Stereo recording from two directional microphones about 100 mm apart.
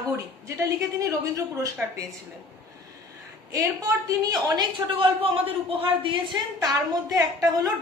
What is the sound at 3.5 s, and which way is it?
A woman's voice, 35° right (ahead or behind).